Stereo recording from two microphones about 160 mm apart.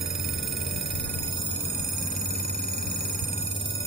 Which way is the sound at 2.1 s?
60° left (ahead or behind).